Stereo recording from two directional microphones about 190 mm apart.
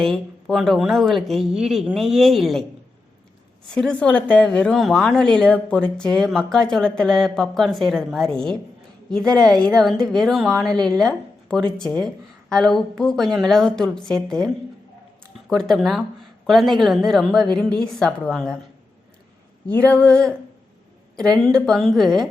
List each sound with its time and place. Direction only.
0.0 s a woman's voice: centre (ahead or behind)
3.8 s a woman's voice: 5° left (ahead or behind)
19.6 s a woman's voice: 5° left (ahead or behind)
21.4 s a woman's voice: centre (ahead or behind)